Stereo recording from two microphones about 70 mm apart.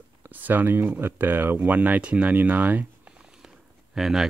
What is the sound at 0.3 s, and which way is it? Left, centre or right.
Speech, right.